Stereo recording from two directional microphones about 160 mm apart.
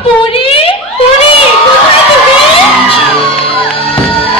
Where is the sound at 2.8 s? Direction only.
35° left (ahead or behind).